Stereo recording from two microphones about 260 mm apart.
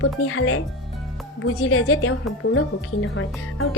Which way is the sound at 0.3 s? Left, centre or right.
Left.